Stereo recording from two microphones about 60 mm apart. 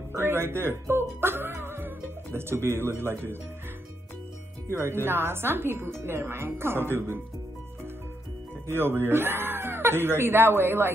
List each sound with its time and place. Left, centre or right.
0.2 s speech: right
4.8 s a woman's voice: right
8.6 s speech: right